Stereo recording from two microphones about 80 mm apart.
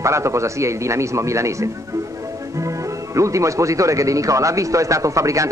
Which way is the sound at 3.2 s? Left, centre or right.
Right.